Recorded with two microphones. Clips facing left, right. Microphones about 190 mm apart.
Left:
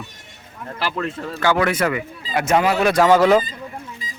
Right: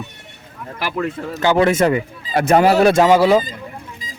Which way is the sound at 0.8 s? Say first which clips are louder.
Right 2 dB; 10° right (ahead or behind).